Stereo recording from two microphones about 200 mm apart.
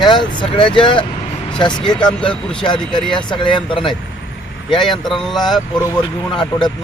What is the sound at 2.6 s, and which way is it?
Speech, 20° left (ahead or behind).